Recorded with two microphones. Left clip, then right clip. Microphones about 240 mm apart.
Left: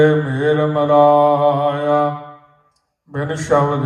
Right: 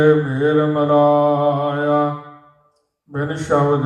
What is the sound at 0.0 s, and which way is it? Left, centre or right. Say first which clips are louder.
Mantra: even; left.